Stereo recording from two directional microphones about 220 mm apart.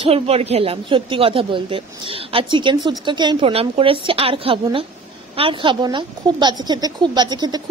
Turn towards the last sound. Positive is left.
turn(degrees=-20)  # may be behind; listen again after turning